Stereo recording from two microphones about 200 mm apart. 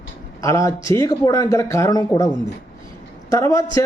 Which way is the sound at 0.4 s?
15° left (ahead or behind).